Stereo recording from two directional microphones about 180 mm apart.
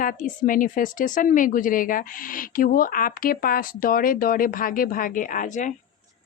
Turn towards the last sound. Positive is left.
turn(degrees=45)  # may be behind; listen again after turning